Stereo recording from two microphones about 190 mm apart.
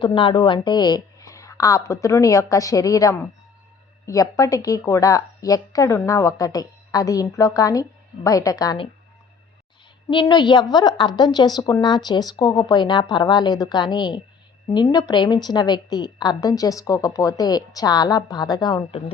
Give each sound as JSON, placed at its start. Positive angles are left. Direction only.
{"t": 0.0, "sound": "a woman's voice", "side_deg": 25}
{"t": 10.1, "sound": "speech", "side_deg": 25}